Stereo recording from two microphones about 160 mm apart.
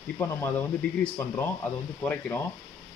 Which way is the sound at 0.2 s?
15° left (ahead or behind).